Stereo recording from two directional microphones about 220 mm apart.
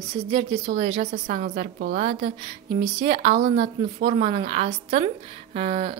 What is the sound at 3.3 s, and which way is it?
Speech, 45° right (ahead or behind).